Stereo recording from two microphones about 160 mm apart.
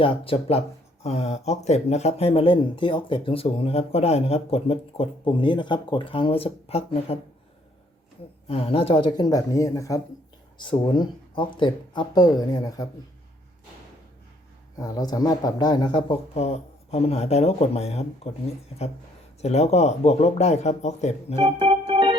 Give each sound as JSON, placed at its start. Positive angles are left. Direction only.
{"t": 0.0, "sound": "speech", "side_deg": 35}
{"t": 8.4, "sound": "speech", "side_deg": 35}
{"t": 14.8, "sound": "speech", "side_deg": 25}
{"t": 19.4, "sound": "speech", "side_deg": 40}
{"t": 21.6, "sound": "organ", "side_deg": -35}